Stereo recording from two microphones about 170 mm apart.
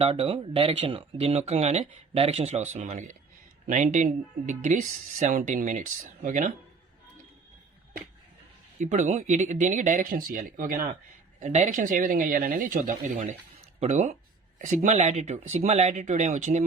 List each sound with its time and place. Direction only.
0.0 s speech: 35° right (ahead or behind)
8.8 s speech: 45° right (ahead or behind)
11.3 s speech: 45° right (ahead or behind)